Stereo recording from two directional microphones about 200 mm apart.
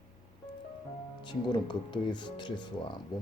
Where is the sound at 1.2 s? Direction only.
25° left (ahead or behind).